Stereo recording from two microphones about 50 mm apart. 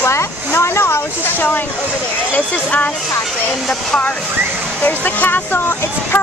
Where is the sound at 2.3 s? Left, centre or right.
Left.